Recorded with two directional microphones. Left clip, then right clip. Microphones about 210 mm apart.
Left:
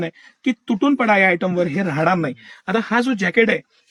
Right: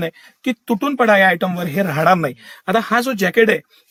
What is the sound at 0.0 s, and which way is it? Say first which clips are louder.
Speech: right 1 dB; 40° right (ahead or behind).